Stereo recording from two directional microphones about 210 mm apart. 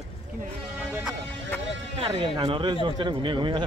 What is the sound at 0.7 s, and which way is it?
Music, 5° right (ahead or behind).